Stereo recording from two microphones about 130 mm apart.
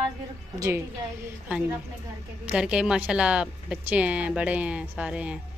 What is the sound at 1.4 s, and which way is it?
Speech, 10° right (ahead or behind).